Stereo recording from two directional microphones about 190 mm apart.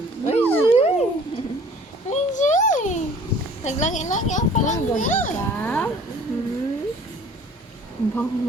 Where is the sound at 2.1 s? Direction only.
40° left (ahead or behind).